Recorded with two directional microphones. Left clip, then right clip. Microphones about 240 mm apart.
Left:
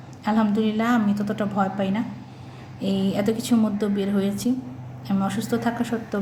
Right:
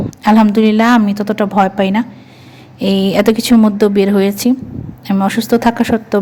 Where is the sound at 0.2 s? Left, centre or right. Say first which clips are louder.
Right 12 dB; right.